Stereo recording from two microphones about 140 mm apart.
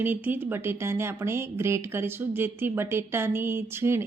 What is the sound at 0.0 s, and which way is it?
Speech, 15° right (ahead or behind).